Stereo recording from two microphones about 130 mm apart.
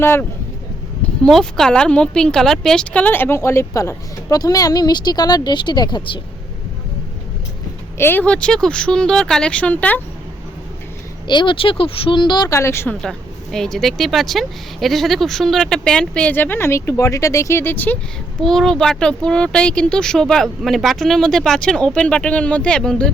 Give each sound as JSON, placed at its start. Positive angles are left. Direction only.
{"t": 0.0, "sound": "speech", "side_deg": 20}
{"t": 1.2, "sound": "a woman's voice", "side_deg": 0}
{"t": 7.9, "sound": "speech", "side_deg": 15}
{"t": 11.3, "sound": "speech", "side_deg": 35}
{"t": 13.0, "sound": "speech", "side_deg": 5}
{"t": 18.3, "sound": "speech", "side_deg": 5}